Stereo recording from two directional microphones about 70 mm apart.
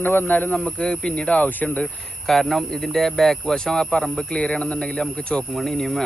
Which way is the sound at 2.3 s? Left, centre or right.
Centre.